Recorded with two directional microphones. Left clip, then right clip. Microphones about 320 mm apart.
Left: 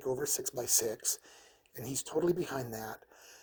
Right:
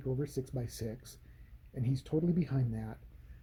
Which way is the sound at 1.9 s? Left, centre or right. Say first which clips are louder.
Left 4 dB; centre.